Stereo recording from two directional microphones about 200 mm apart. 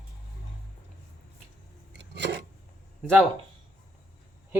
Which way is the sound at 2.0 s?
60° right (ahead or behind).